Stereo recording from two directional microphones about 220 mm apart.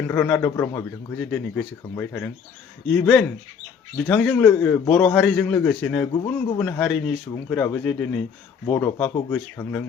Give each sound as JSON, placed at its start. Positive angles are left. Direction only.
{"t": 0.1, "sound": "a man's voice", "side_deg": 10}